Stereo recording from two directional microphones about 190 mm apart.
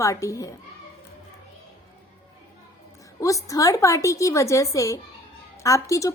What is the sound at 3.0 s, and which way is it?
A woman's voice, 15° left (ahead or behind).